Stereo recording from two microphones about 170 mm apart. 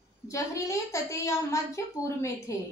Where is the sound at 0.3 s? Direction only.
15° left (ahead or behind).